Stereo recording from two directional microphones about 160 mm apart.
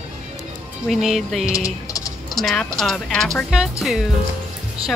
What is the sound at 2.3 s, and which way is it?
Speech, centre (ahead or behind).